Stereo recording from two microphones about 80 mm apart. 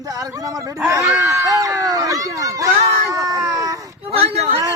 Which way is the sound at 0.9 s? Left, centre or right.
Right.